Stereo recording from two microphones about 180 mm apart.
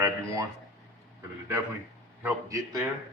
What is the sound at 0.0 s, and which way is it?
Speech, 20° right (ahead or behind).